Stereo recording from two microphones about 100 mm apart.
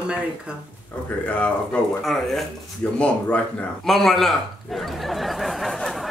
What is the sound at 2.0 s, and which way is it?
Speech, centre (ahead or behind).